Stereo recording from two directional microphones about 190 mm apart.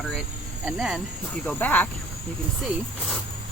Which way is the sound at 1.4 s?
10° left (ahead or behind).